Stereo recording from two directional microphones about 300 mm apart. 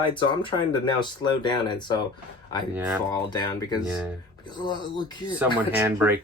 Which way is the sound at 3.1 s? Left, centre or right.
Centre.